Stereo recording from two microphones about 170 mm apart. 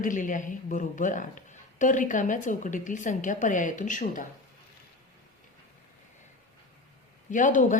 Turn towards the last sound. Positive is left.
turn(degrees=50)  # may be behind; listen again after turning